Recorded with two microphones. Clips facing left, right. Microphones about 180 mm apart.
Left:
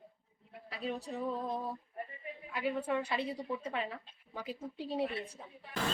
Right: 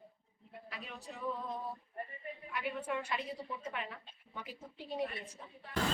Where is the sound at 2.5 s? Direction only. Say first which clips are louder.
Left 5 dB; 30° left (ahead or behind).